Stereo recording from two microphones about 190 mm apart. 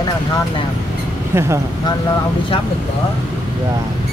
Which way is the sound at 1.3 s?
10° right (ahead or behind).